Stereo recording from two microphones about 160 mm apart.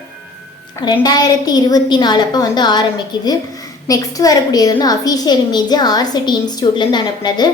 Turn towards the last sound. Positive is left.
turn(degrees=25)  # may be behind; listen again after turning